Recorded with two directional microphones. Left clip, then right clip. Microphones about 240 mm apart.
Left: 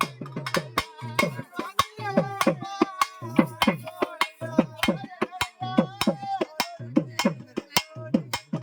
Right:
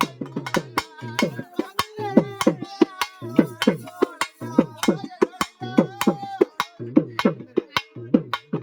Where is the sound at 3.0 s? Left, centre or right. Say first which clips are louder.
Right 2 dB; centre.